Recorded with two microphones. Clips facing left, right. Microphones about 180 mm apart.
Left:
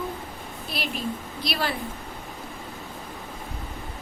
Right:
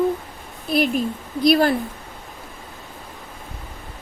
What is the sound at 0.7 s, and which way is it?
Speech, 50° right (ahead or behind).